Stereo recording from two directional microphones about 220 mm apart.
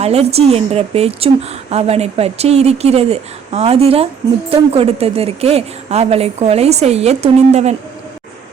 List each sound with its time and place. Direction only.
0.0 s a woman's voice: 30° right (ahead or behind)